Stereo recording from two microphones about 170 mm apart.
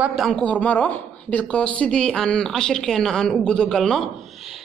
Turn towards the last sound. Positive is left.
turn(degrees=0)  # may be behind; listen again after turning